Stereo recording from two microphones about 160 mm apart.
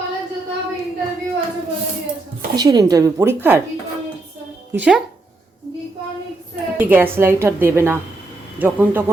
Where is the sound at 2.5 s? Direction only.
25° right (ahead or behind).